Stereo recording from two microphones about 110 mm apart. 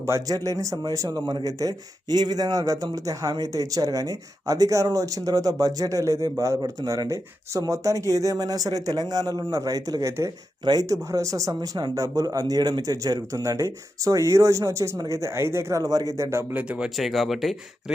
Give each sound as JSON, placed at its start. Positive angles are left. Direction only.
{"t": 0.0, "sound": "speech", "side_deg": -30}